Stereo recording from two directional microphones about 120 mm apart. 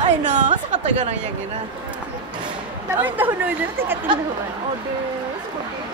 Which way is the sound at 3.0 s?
15° right (ahead or behind).